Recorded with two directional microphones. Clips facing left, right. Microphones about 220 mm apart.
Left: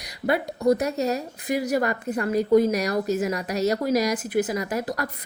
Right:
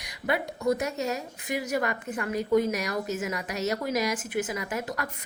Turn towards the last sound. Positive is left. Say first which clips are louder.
# left 5 dB
turn(degrees=35)  # may be behind; listen again after turning